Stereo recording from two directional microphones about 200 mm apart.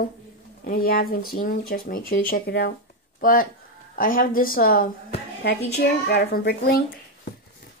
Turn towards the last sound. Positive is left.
turn(degrees=50)  # may be behind; listen again after turning